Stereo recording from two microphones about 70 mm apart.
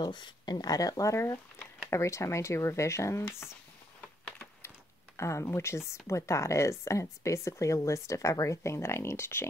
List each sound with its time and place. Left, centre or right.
0.0 s speech: left
1.1 s speech: left
4.6 s a sound: left
6.0 s speech: left